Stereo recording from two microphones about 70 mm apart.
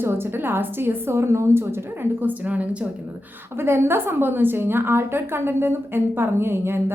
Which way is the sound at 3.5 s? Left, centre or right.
Right.